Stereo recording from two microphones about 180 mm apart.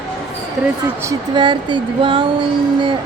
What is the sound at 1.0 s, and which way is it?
Speech, 25° right (ahead or behind).